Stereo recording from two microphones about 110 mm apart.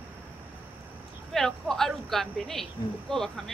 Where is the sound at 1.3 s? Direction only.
5° left (ahead or behind).